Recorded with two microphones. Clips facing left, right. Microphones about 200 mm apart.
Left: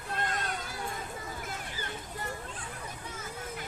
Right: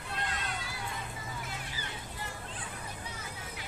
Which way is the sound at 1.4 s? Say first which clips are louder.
Left 3 dB; 45° left (ahead or behind).